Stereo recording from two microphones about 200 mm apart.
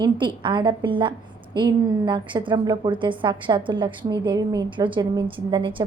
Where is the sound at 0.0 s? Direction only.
25° right (ahead or behind).